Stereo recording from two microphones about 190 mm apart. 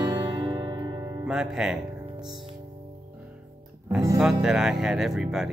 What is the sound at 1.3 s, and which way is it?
Speech, 5° right (ahead or behind).